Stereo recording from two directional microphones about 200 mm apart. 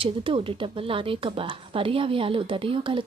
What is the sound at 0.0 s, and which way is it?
Speech, 25° right (ahead or behind).